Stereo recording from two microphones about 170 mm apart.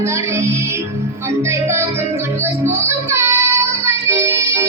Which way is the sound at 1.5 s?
15° right (ahead or behind).